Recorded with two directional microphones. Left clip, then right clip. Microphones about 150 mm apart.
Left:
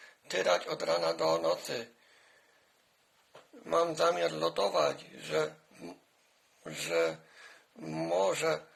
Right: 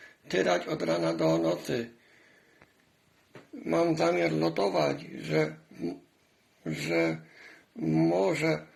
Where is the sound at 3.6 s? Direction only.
45° left (ahead or behind).